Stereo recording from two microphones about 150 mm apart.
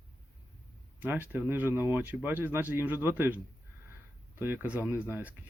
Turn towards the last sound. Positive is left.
turn(degrees=-15)  # may be behind; listen again after turning